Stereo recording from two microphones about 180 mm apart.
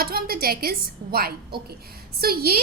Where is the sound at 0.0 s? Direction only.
55° right (ahead or behind).